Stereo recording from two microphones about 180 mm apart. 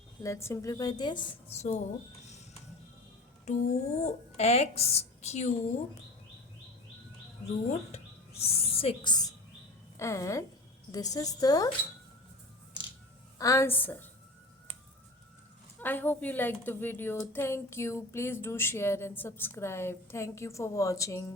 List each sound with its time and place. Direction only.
0.2 s a woman's voice: 15° left (ahead or behind); by 1.8 s 35° left (ahead or behind)
3.5 s a woman's voice: 40° left (ahead or behind)
7.9 s a woman's voice: 35° left (ahead or behind)
13.4 s a woman's voice: 15° left (ahead or behind)
15.8 s a woman's voice: 10° left (ahead or behind)